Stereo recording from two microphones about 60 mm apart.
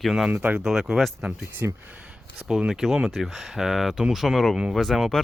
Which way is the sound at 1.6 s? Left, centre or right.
Right.